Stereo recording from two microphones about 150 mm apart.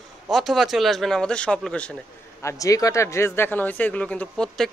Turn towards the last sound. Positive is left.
turn(degrees=5)  # may be behind; listen again after turning